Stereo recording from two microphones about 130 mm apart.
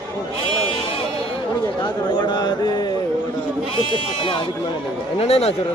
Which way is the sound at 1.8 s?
35° left (ahead or behind).